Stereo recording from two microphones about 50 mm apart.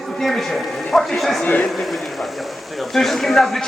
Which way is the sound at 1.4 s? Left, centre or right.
Left.